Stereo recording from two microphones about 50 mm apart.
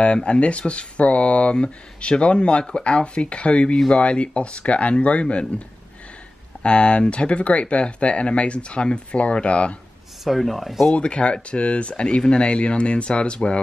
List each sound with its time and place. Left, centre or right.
0.0 s speech: left
3.7 s speech: centre
4.0 s speech: left
6.6 s speech: left
10.2 s speech: centre
11.0 s speech: left